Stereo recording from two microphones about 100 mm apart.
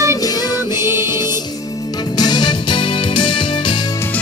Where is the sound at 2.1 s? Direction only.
45° left (ahead or behind).